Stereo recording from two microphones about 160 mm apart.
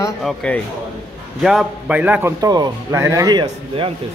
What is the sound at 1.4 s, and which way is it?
A man's voice, 5° right (ahead or behind).